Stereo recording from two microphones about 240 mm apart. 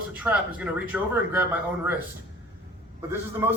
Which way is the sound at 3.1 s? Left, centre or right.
Centre.